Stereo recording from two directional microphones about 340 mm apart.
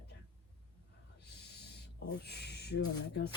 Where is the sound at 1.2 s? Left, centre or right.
Left.